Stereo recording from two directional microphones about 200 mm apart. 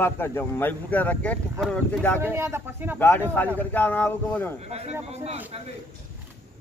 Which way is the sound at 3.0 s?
10° left (ahead or behind).